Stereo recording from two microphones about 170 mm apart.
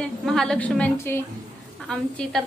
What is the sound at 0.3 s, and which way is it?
Speech, 5° left (ahead or behind).